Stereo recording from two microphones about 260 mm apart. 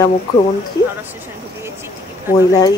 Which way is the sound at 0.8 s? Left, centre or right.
Centre.